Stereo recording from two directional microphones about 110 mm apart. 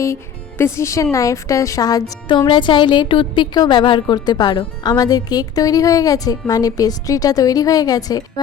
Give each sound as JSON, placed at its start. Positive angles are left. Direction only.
{"t": 0.6, "sound": "a woman's voice", "side_deg": 25}